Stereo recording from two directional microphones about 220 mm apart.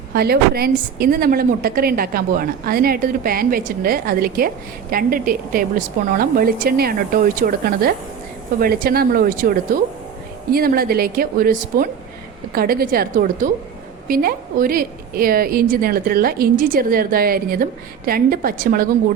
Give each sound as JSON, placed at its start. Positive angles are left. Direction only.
{"t": 0.1, "sound": "a woman's voice", "side_deg": -45}
{"t": 10.5, "sound": "a woman's voice", "side_deg": -45}